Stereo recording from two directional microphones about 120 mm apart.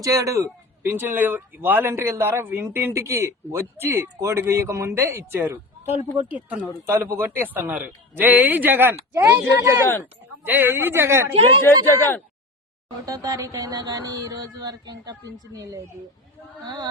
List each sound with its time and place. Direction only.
0.0 s speech: 30° right (ahead or behind)
11.6 s a man's voice: 20° left (ahead or behind)
13.1 s a sound: 30° right (ahead or behind)